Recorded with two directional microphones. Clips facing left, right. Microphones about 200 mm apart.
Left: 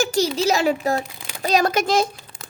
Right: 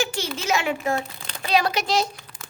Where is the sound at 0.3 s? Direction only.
35° left (ahead or behind).